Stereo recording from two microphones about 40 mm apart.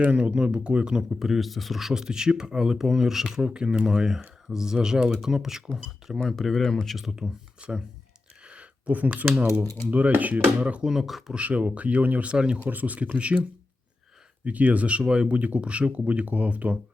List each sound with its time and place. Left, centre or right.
0.0 s speech: right
1.2 s speech: centre
1.9 s speech: centre
3.3 s speech: right
6.2 s speech: centre
6.9 s speech: centre
7.2 s speech: right
8.9 s speech: right
10.6 s speech: right
10.8 s speech: centre
11.3 s speech: right
12.3 s speech: right
12.6 s speech: right
14.4 s speech: right